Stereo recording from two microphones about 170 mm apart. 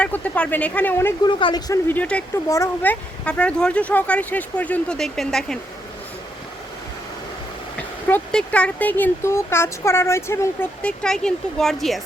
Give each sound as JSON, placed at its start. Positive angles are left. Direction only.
{"t": 0.0, "sound": "speech", "side_deg": 5}
{"t": 1.2, "sound": "speech", "side_deg": 30}
{"t": 1.9, "sound": "speech", "side_deg": 10}
{"t": 7.8, "sound": "speech", "side_deg": 10}